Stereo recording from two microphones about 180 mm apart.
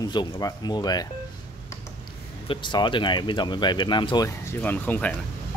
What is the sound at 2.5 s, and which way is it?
Speech, 25° left (ahead or behind).